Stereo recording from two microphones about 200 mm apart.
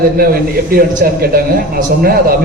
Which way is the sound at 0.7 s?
50° right (ahead or behind).